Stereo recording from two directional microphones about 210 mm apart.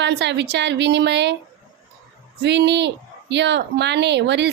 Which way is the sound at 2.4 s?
55° right (ahead or behind).